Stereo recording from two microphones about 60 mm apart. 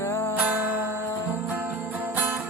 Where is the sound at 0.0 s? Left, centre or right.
Left.